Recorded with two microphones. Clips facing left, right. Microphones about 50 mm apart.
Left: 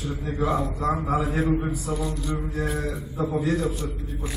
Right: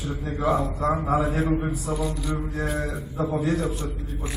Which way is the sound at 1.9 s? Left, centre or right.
Centre.